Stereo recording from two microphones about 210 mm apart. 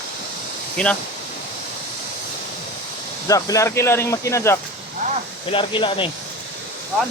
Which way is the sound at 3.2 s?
15° left (ahead or behind).